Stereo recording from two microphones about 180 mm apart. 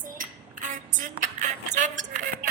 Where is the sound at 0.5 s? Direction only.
45° right (ahead or behind).